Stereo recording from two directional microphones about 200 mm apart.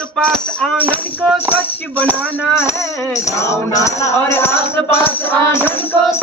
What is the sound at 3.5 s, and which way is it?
Music, 15° left (ahead or behind).